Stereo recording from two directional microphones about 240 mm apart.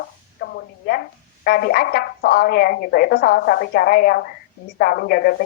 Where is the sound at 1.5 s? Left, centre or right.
Left.